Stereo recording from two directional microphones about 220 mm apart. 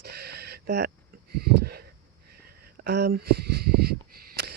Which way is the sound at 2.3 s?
45° right (ahead or behind).